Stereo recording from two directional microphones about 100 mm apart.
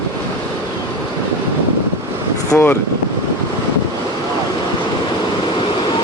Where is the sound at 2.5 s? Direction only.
25° left (ahead or behind).